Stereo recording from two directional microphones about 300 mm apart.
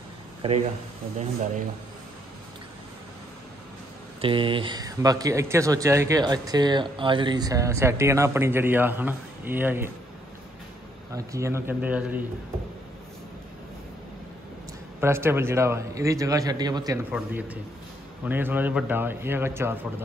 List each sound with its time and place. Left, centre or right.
0.4 s speech: centre
4.2 s speech: centre
11.1 s speech: centre
15.0 s speech: centre